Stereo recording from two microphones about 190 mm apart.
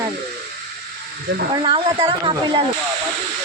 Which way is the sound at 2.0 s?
25° right (ahead or behind).